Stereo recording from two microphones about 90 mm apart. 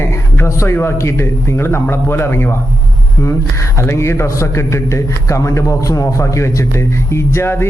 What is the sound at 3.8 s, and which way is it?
A man's voice, 30° left (ahead or behind).